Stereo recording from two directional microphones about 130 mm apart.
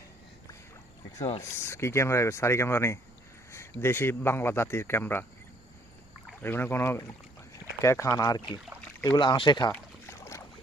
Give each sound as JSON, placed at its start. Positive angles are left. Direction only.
{"t": 1.4, "sound": "speech", "side_deg": 20}
{"t": 6.4, "sound": "speech", "side_deg": 15}
{"t": 10.1, "sound": "boat", "side_deg": 20}